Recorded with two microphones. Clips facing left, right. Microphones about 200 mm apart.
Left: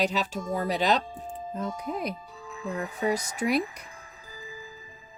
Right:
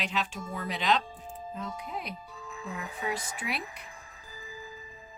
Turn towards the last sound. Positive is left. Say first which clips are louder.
# left 11 dB
turn(degrees=40)  # may be behind; listen again after turning